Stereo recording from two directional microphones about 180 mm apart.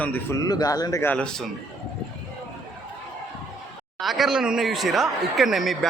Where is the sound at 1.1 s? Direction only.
5° left (ahead or behind).